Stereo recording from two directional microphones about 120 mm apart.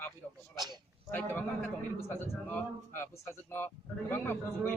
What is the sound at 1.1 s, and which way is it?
A man's voice, 10° left (ahead or behind).